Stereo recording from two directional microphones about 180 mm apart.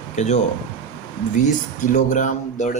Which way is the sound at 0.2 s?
40° left (ahead or behind).